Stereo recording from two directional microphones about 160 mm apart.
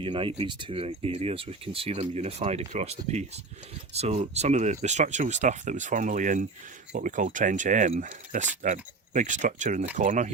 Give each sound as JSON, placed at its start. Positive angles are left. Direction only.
{"t": 0.0, "sound": "speech", "side_deg": -35}